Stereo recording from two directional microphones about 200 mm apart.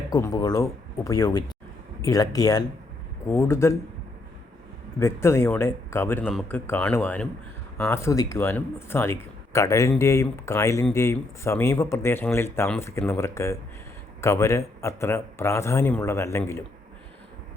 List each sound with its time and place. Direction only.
0.1 s a man's voice: 20° left (ahead or behind)
4.9 s a man's voice: 15° left (ahead or behind)